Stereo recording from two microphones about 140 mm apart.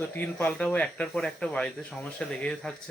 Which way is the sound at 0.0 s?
15° left (ahead or behind).